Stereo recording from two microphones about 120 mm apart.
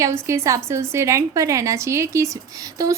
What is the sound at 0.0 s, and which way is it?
A woman's voice, 25° right (ahead or behind).